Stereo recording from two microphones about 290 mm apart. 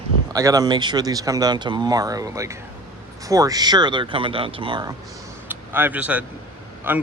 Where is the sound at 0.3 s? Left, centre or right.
Centre.